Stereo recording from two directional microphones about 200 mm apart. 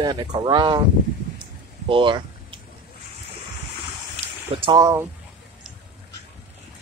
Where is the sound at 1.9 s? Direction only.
25° right (ahead or behind).